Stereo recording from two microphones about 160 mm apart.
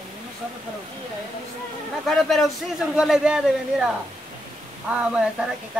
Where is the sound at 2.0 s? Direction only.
Centre (ahead or behind).